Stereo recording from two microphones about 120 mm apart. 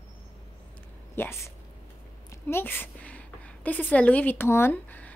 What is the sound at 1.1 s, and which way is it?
A woman's voice, 20° left (ahead or behind).